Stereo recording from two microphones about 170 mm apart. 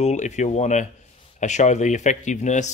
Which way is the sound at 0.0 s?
45° left (ahead or behind).